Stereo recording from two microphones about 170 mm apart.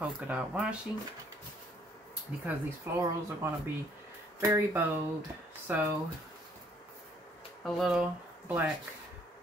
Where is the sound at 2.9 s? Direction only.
10° right (ahead or behind).